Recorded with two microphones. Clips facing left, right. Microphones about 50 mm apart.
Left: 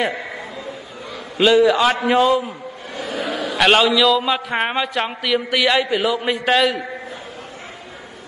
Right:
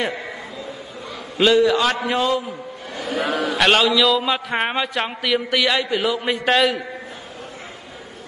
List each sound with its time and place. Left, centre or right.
1.4 s a man's voice: centre
3.2 s a sound: right
3.4 s a man's voice: centre